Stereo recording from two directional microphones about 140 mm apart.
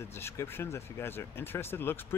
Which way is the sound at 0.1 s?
15° left (ahead or behind).